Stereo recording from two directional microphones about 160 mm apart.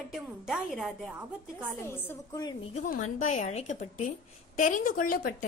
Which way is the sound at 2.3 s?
25° left (ahead or behind).